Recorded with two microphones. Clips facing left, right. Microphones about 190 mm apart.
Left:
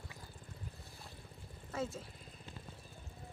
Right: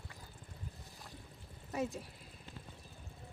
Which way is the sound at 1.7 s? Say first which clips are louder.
Right 2 dB; 15° right (ahead or behind).